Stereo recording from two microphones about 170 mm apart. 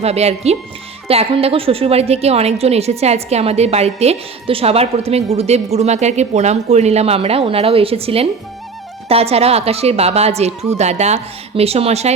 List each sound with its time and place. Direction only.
0.0 s a woman's voice: 40° right (ahead or behind)